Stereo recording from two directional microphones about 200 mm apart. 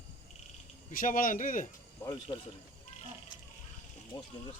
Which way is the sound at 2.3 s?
25° left (ahead or behind).